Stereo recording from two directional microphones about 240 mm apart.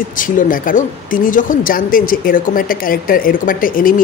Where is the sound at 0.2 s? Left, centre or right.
Left.